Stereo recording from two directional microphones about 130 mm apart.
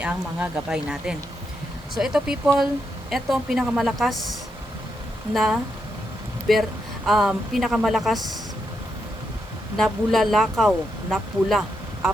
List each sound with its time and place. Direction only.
0.0 s speech: 10° right (ahead or behind)
9.7 s speech: centre (ahead or behind)